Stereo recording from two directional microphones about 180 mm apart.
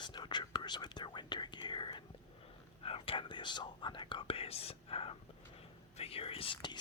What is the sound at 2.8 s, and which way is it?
Speech, 30° left (ahead or behind).